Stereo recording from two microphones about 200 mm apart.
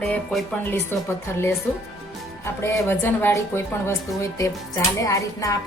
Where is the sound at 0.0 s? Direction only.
5° left (ahead or behind).